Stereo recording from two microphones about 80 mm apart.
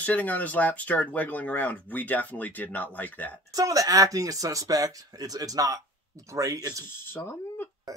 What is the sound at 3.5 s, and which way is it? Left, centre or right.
Speech, right.